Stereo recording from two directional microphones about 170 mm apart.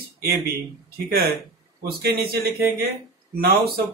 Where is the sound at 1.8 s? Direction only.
65° right (ahead or behind).